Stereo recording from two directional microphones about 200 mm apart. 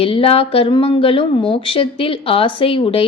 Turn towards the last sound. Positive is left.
turn(degrees=25)  # may be behind; listen again after turning